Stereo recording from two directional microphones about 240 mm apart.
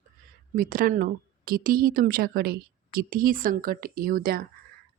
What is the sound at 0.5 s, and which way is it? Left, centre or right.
A woman's voice, right.